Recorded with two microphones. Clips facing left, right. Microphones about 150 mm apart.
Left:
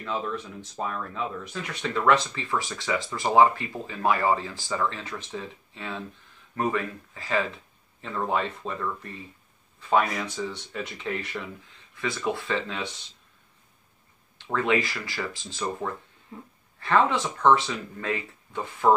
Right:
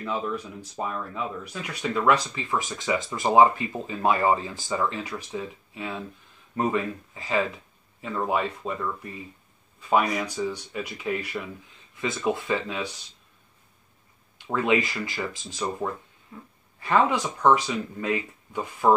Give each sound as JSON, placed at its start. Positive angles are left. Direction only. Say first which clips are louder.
{"t": 0.0, "sound": "speech", "louder": "right 1 dB", "side_deg": -10}
{"t": 14.4, "sound": "speech", "louder": "right 1 dB", "side_deg": -15}